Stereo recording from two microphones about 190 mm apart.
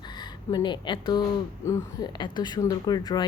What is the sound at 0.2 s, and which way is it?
A woman's voice, 25° left (ahead or behind).